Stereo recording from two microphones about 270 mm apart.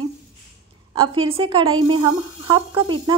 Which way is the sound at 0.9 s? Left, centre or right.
Centre.